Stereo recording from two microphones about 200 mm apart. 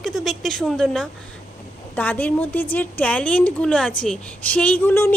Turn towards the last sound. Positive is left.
turn(degrees=10)  # may be behind; listen again after turning